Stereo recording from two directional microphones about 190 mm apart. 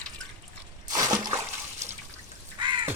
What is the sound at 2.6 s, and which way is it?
Crow, 25° right (ahead or behind).